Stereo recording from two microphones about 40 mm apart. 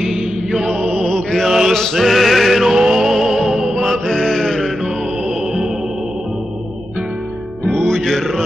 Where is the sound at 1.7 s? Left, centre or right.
Centre.